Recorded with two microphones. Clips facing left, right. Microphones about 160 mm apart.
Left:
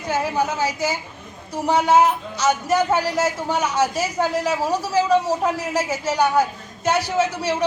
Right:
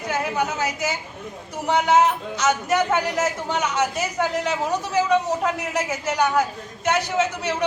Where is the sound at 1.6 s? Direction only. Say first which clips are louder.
Left 2 dB; 10° left (ahead or behind).